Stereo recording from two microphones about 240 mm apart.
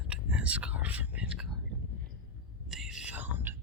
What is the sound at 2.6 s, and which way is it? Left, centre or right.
Whispering, centre.